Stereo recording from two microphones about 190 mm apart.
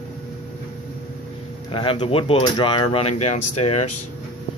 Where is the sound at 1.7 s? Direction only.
25° left (ahead or behind).